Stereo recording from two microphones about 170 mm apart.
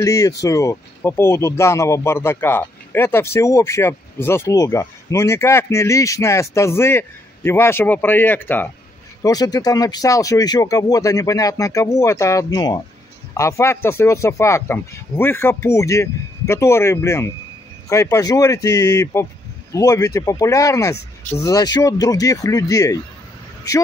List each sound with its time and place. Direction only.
0.0 s speech: 20° left (ahead or behind)
9.2 s speech: 20° left (ahead or behind)